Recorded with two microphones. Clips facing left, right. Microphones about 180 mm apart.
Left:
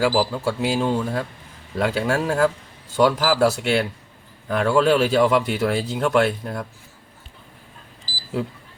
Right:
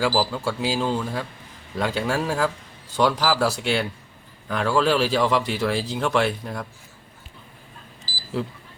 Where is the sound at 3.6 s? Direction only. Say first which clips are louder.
Left 3 dB; centre (ahead or behind).